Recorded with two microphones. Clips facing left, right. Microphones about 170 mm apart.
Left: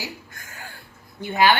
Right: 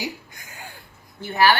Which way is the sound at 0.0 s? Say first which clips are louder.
Right 4 dB; 15° right (ahead or behind).